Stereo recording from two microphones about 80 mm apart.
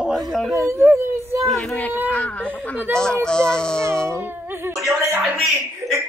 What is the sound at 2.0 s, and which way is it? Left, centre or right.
Speech, centre.